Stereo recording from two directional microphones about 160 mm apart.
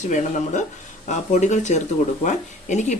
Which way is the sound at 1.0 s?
50° left (ahead or behind).